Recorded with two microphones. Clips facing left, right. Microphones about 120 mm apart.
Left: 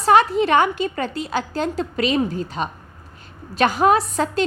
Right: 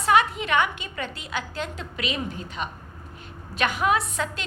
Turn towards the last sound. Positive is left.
turn(degrees=35)  # may be behind; listen again after turning